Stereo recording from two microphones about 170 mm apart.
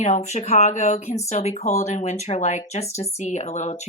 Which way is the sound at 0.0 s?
40° left (ahead or behind).